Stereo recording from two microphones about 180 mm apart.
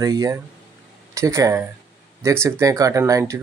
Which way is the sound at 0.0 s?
20° right (ahead or behind).